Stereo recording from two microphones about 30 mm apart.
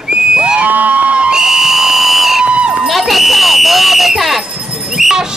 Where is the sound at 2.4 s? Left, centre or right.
Right.